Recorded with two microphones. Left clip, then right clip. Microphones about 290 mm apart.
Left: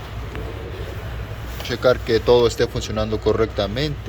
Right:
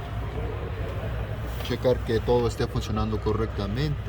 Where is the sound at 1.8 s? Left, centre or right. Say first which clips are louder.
Left 8 dB; left.